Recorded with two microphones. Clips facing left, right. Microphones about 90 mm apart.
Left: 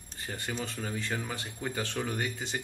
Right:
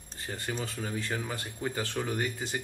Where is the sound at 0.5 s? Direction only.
5° right (ahead or behind).